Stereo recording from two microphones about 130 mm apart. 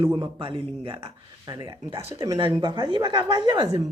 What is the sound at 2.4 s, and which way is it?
Speech, 40° right (ahead or behind).